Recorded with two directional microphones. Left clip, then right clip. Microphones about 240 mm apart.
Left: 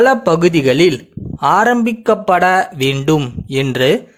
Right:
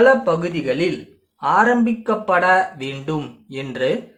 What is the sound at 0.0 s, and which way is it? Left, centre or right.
Speech, left.